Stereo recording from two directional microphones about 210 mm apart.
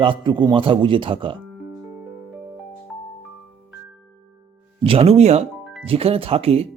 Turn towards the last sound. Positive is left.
turn(degrees=-30)  # may be behind; listen again after turning